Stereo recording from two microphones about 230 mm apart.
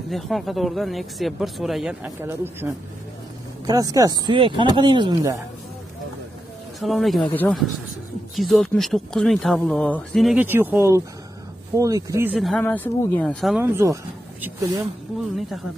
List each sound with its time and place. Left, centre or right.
0.1 s speech: centre
6.8 s speech: centre
12.4 s speech: centre